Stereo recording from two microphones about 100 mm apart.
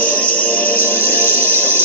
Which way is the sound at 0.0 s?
15° left (ahead or behind).